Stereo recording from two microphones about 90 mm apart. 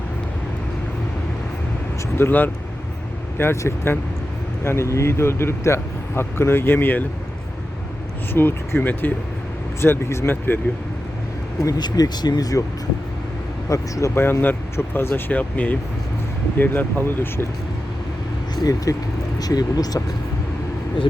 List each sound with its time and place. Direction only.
2.1 s speech: 25° left (ahead or behind)
8.3 s speech: 25° left (ahead or behind)
11.8 s speech: 50° left (ahead or behind)
13.7 s speech: 35° left (ahead or behind)
18.5 s speech: 40° left (ahead or behind)